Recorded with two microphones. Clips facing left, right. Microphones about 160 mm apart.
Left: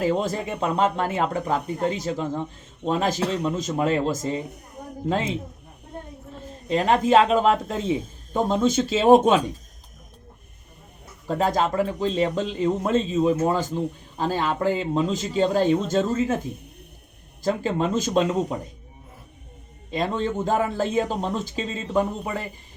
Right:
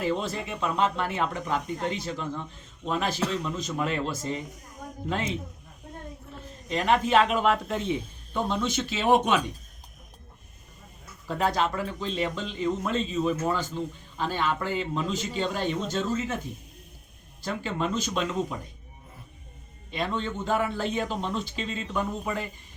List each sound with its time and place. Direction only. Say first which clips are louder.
0.0 s speech: left 5 dB; 40° left (ahead or behind)
4.4 s speech: left 5 dB; 60° left (ahead or behind)
4.8 s a sound: left 6 dB; 35° left (ahead or behind)
6.7 s speech: left 5 dB; 35° left (ahead or behind)
11.3 s speech: left 4 dB; 40° left (ahead or behind)
17.4 s speech: left 6 dB; 40° left (ahead or behind)
19.9 s speech: left 5 dB; 40° left (ahead or behind)